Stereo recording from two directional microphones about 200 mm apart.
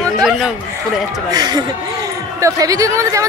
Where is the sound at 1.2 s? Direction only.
20° right (ahead or behind).